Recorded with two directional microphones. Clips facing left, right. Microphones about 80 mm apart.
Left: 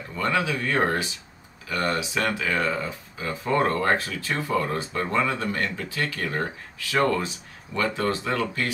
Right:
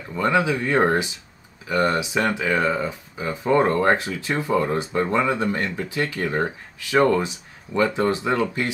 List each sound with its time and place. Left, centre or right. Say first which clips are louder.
0.1 s speech: right 5 dB; centre